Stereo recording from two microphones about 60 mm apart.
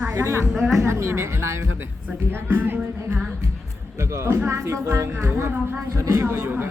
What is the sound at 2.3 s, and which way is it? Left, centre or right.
Music, right.